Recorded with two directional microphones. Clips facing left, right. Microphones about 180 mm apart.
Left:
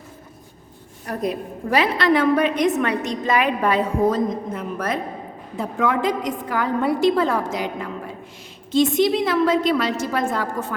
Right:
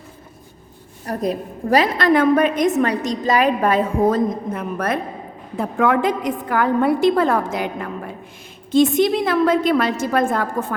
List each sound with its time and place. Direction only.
1.0 s a woman's voice: 40° right (ahead or behind)